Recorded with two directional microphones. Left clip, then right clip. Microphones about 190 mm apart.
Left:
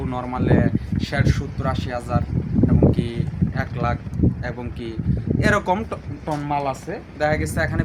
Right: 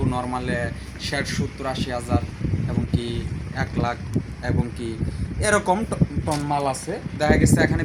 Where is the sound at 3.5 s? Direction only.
Centre (ahead or behind).